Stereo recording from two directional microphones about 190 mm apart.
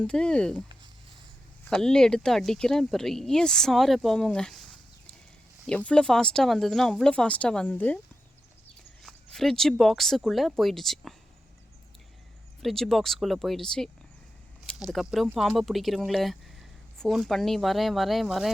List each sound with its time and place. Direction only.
0.0 s speech: 5° left (ahead or behind)
1.7 s speech: 5° left (ahead or behind)
5.6 s speech: 5° left (ahead or behind)
9.0 s speech: centre (ahead or behind)
12.6 s speech: centre (ahead or behind)